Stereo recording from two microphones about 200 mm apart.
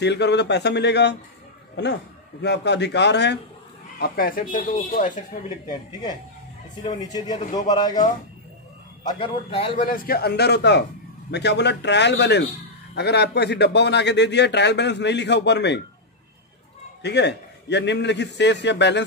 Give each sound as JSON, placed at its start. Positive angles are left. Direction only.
{"t": 0.0, "sound": "a man's voice", "side_deg": 60}
{"t": 2.4, "sound": "a man's voice", "side_deg": 60}
{"t": 4.0, "sound": "speech", "side_deg": 45}
{"t": 5.7, "sound": "a man's voice", "side_deg": 20}
{"t": 9.0, "sound": "a man's voice", "side_deg": 25}
{"t": 9.8, "sound": "a man's voice", "side_deg": 45}
{"t": 17.0, "sound": "a man's voice", "side_deg": 60}